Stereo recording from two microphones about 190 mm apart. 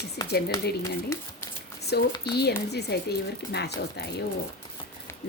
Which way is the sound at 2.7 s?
60° left (ahead or behind).